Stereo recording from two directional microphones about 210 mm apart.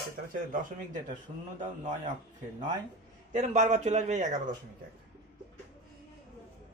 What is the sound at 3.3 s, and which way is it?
A man's voice, 35° right (ahead or behind).